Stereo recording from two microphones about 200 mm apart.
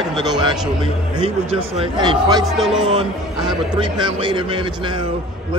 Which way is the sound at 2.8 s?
25° right (ahead or behind).